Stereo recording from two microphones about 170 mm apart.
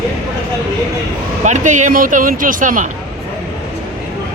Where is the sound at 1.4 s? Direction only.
45° right (ahead or behind).